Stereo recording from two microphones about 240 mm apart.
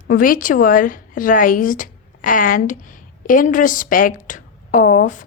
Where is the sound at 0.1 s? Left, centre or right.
Left.